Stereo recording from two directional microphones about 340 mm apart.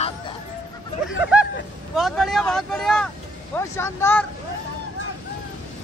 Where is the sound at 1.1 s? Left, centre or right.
Centre.